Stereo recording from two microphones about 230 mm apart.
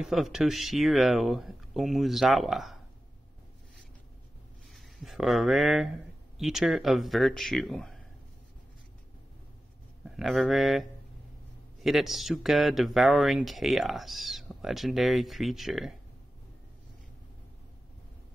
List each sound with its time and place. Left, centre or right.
0.0 s speech: centre
4.7 s speech: centre
10.0 s speech: centre